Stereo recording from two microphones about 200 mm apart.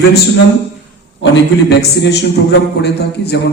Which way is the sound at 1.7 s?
60° left (ahead or behind).